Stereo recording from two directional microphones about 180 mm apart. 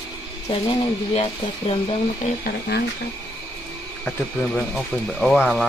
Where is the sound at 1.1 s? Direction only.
35° left (ahead or behind).